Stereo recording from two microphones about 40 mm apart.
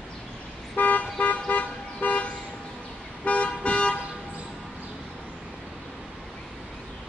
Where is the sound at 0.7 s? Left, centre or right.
Left.